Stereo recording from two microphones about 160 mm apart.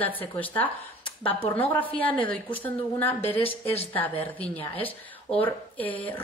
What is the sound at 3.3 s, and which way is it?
Speech, 40° left (ahead or behind).